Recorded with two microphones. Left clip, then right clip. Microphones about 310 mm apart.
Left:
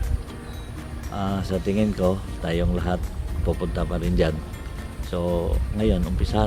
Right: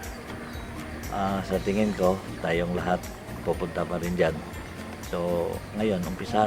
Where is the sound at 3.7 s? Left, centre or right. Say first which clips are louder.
Left 1 dB; left.